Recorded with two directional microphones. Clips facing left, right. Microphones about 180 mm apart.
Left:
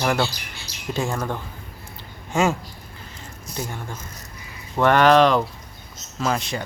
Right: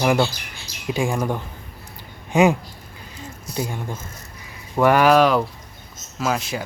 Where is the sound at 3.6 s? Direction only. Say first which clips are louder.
Right 4 dB; 15° right (ahead or behind).